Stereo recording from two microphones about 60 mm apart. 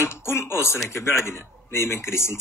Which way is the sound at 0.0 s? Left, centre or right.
Left.